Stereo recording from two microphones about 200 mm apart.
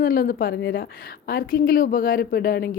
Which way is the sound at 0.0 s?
45° left (ahead or behind).